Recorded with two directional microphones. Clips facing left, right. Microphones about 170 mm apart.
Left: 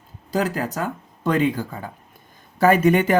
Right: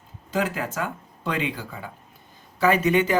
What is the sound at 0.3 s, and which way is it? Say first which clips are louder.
Speech: left 3 dB; 40° left (ahead or behind).